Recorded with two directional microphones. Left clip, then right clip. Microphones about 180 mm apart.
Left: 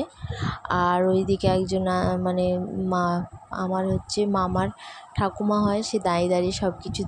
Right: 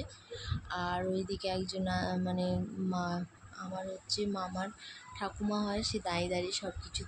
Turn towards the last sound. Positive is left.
turn(degrees=40)  # may be behind; listen again after turning